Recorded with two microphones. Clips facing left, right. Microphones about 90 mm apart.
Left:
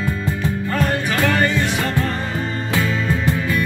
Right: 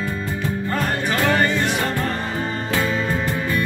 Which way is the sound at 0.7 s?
35° right (ahead or behind).